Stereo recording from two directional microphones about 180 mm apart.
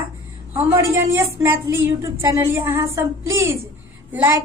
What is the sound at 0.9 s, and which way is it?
Speech, 15° right (ahead or behind).